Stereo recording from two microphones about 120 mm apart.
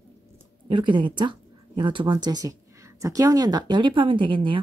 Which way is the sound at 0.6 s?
40° right (ahead or behind).